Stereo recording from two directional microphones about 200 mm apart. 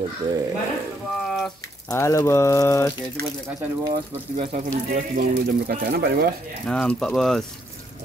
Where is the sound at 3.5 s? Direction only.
20° right (ahead or behind).